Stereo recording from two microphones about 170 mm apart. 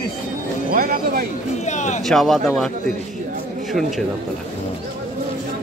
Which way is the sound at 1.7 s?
45° left (ahead or behind).